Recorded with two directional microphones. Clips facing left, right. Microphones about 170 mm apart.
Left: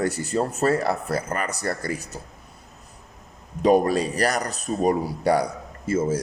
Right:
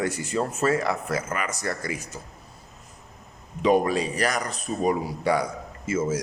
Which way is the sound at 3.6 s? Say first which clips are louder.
Left 3 dB; 40° left (ahead or behind).